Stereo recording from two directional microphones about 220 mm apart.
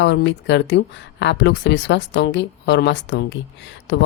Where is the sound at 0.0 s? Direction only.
55° left (ahead or behind).